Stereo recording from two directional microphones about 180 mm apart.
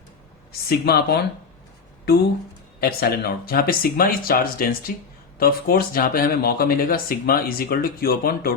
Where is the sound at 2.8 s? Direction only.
60° left (ahead or behind).